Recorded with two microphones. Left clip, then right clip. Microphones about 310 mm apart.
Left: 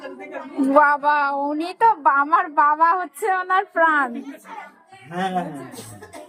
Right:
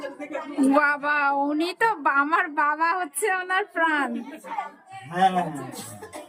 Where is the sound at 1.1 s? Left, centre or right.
Centre.